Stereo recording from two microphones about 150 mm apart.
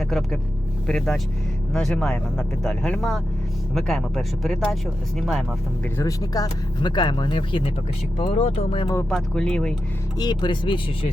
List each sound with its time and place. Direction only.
0.0 s speech: centre (ahead or behind)
6.0 s speech: 25° left (ahead or behind)
8.2 s speech: 45° left (ahead or behind)
9.0 s speech: 5° left (ahead or behind)
10.2 s speech: 30° left (ahead or behind)